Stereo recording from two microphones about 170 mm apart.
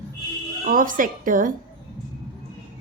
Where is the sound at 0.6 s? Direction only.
55° right (ahead or behind).